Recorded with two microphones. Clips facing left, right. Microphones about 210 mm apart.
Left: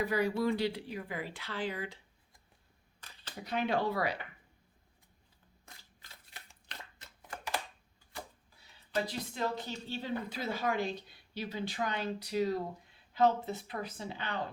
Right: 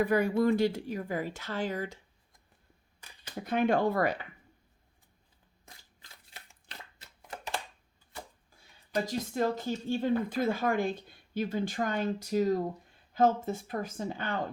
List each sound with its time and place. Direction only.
0.0 s speech: 50° right (ahead or behind)
3.4 s speech: 50° right (ahead or behind)
7.3 s a sound: 20° right (ahead or behind)
9.0 s speech: 45° right (ahead or behind)